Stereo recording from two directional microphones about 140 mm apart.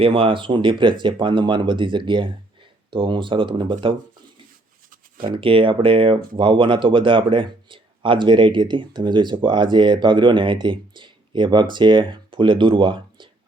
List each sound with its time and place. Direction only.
0.0 s speech: 40° right (ahead or behind)
4.9 s a sound: 90° right
5.4 s speech: 40° right (ahead or behind)